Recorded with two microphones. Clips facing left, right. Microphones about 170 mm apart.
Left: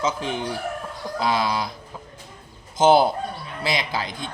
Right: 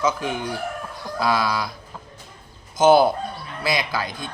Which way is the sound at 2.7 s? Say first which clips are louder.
Right 1 dB; 25° left (ahead or behind).